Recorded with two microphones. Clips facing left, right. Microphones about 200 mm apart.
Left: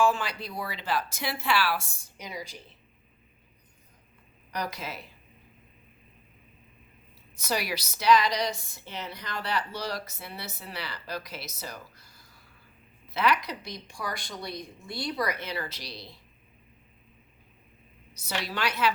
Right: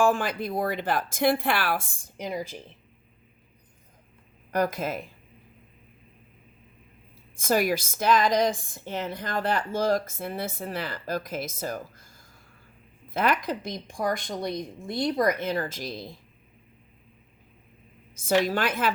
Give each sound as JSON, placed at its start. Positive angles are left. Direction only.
{"t": 0.0, "sound": "a woman's voice", "side_deg": -50}
{"t": 4.5, "sound": "a woman's voice", "side_deg": -50}
{"t": 7.3, "sound": "a woman's voice", "side_deg": -50}
{"t": 18.1, "sound": "a woman's voice", "side_deg": -50}